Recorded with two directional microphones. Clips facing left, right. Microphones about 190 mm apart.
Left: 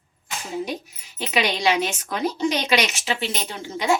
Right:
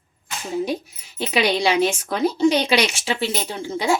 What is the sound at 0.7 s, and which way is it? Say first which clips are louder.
A woman's voice: right 5 dB; 30° right (ahead or behind).